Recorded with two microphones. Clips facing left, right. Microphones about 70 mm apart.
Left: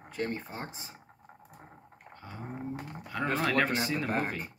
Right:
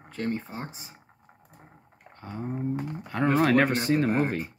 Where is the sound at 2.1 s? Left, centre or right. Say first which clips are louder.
Right 8 dB; right.